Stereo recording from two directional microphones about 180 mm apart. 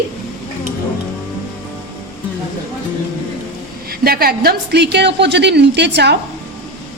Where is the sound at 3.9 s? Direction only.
60° right (ahead or behind).